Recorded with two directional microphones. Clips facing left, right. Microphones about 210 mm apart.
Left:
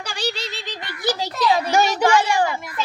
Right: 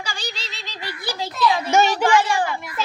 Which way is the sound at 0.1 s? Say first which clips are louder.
Left 6 dB; 55° left (ahead or behind).